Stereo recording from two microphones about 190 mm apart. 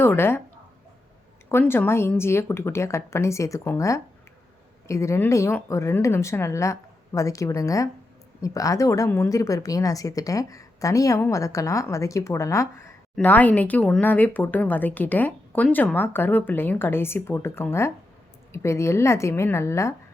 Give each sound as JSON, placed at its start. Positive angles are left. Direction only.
{"t": 0.0, "sound": "speech", "side_deg": 10}
{"t": 1.5, "sound": "speech", "side_deg": 10}